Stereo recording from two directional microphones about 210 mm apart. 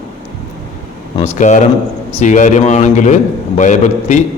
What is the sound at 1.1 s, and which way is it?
A man's voice, 30° left (ahead or behind).